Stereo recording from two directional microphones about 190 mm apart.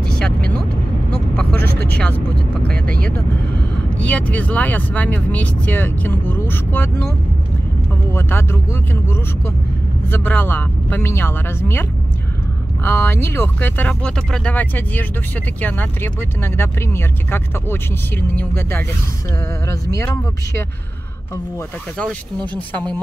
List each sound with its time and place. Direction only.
0.0 s vehicle: 5° left (ahead or behind)
4.1 s speech: 5° left (ahead or behind)
8.1 s speech: 10° left (ahead or behind)
10.0 s speech: 10° left (ahead or behind)
12.8 s speech: 10° left (ahead or behind)